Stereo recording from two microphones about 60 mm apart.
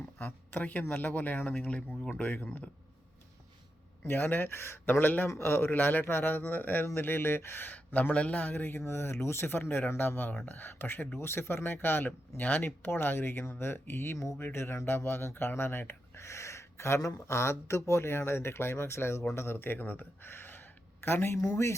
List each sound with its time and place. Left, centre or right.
0.2 s speech: left
1.5 s speech: centre
4.0 s speech: left
8.8 s speech: left
17.0 s speech: left
17.2 s speech: left